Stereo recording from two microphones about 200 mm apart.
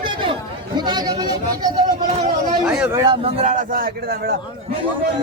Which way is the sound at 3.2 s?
35° right (ahead or behind).